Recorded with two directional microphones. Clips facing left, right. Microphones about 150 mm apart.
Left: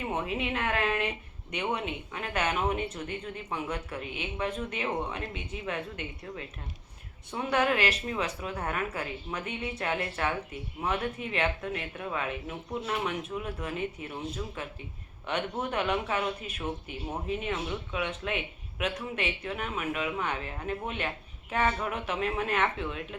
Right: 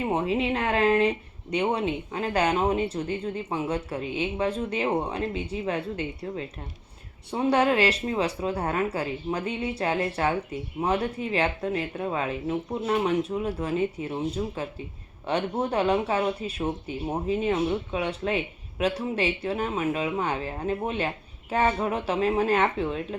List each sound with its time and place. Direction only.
0.0 s speech: 30° right (ahead or behind)